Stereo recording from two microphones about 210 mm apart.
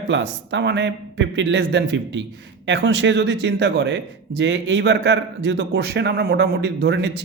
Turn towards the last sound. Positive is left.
turn(degrees=-55)  # may be behind; listen again after turning